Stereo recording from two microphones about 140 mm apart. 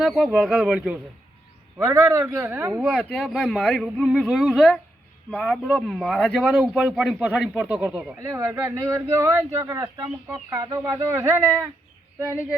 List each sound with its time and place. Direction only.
0.0 s speech: centre (ahead or behind)
1.8 s speech: 20° right (ahead or behind)
3.1 s speech: 5° left (ahead or behind)
5.6 s speech: 5° right (ahead or behind)